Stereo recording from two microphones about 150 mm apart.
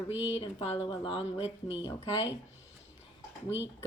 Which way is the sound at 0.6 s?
40° left (ahead or behind).